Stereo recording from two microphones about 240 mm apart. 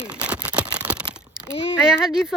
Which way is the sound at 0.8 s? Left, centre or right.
Centre.